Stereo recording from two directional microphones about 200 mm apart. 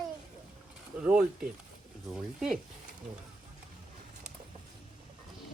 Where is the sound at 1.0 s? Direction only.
5° right (ahead or behind).